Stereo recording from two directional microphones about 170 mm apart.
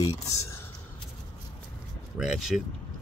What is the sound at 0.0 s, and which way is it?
Speech, 20° left (ahead or behind).